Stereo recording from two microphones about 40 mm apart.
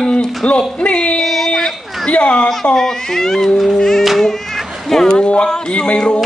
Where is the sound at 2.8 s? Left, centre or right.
Centre.